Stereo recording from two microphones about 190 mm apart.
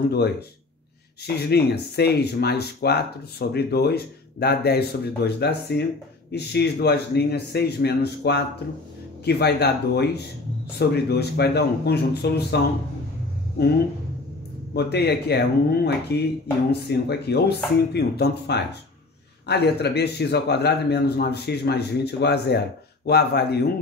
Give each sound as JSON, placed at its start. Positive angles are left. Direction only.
{"t": 1.2, "sound": "speech", "side_deg": 60}
{"t": 14.7, "sound": "speech", "side_deg": 60}